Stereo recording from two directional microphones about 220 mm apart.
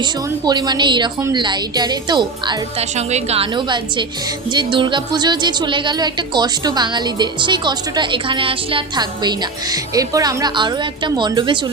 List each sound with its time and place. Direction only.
0.0 s a woman's voice: 20° right (ahead or behind)